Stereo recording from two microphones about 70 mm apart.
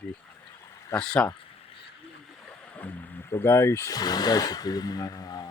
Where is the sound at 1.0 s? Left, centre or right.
Centre.